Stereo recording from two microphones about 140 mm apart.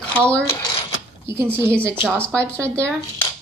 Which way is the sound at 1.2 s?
15° right (ahead or behind).